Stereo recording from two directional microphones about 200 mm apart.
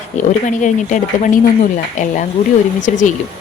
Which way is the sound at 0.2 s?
40° left (ahead or behind).